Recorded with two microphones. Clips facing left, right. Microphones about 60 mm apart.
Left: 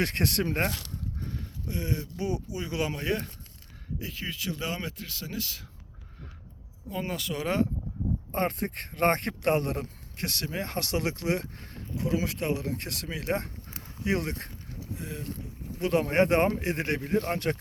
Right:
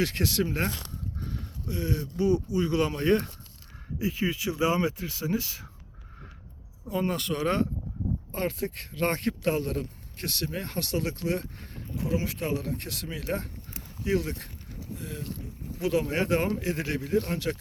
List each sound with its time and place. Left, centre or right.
0.0 s speech: left
1.6 s speech: left; by 3.2 s centre
3.9 s speech: centre
7.0 s speech: centre
8.3 s speech: left
11.9 s speech: left
14.9 s boat: left
15.4 s speech: centre
15.8 s speech: left